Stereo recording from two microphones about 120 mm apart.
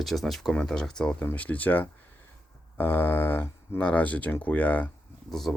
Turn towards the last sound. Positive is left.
turn(degrees=0)  # may be behind; listen again after turning